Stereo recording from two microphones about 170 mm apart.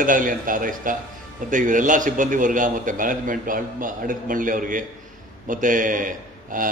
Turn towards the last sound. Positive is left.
turn(degrees=-50)  # may be behind; listen again after turning